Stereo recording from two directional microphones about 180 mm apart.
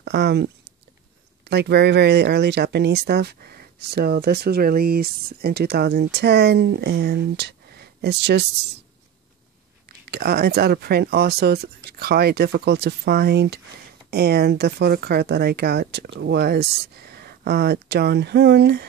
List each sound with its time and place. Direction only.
0.0 s speech: 70° right (ahead or behind)
10.1 s speech: 60° right (ahead or behind)